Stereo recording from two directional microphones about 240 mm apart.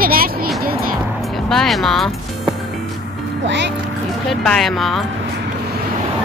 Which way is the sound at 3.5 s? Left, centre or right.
Right.